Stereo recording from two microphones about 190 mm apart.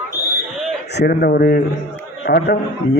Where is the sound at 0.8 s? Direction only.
60° left (ahead or behind).